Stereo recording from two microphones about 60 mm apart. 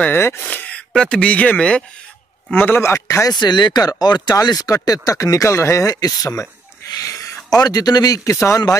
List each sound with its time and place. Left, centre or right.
0.1 s a man's voice: left
0.5 s a sound: left
0.9 s speech: centre
2.5 s a man's voice: left
2.8 s speech: left
4.4 s speech: left
6.9 s a sound: left
7.4 s speech: left